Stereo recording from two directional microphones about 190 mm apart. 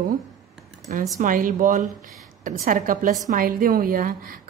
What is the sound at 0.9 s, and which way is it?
A woman's voice, 45° right (ahead or behind).